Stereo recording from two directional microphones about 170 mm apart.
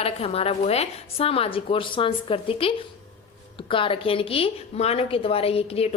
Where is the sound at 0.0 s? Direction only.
35° left (ahead or behind).